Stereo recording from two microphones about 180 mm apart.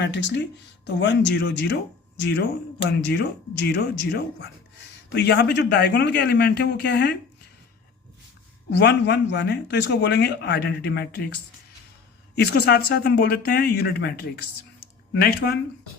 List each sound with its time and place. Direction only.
0.0 s a man's voice: 75° left (ahead or behind)
8.8 s a man's voice: 70° left (ahead or behind)
12.4 s speech: 65° left (ahead or behind)